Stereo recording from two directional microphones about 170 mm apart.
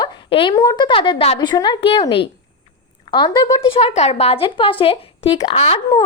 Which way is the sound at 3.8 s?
40° left (ahead or behind).